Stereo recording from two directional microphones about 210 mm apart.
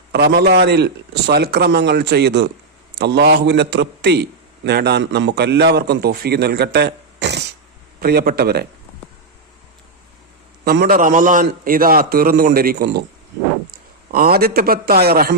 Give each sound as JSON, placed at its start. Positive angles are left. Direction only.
{"t": 0.1, "sound": "a man's voice", "side_deg": -50}
{"t": 10.7, "sound": "a man's voice", "side_deg": -45}